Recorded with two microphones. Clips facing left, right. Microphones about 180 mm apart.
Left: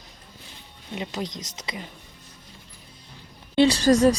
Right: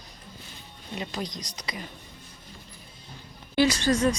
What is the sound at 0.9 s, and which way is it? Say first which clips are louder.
Speech: left 2 dB; 20° left (ahead or behind).